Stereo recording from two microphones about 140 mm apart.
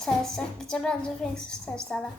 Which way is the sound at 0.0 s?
5° left (ahead or behind).